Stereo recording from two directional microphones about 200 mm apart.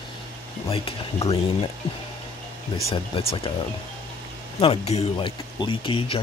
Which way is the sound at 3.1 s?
25° left (ahead or behind).